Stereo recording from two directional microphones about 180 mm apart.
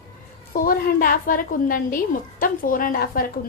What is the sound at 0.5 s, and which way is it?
A woman's voice, 50° left (ahead or behind).